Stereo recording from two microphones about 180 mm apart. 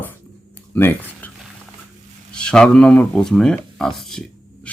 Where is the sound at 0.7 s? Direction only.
10° left (ahead or behind).